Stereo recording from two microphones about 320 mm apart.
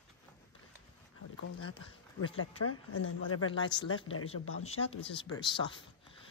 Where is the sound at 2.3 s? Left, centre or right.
Left.